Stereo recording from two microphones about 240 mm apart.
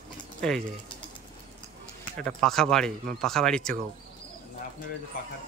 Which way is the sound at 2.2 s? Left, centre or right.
Centre.